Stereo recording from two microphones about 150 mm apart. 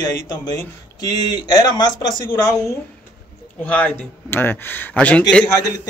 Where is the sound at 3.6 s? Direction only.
10° left (ahead or behind).